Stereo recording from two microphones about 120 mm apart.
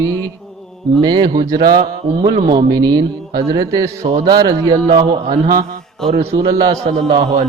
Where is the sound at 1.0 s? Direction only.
40° right (ahead or behind).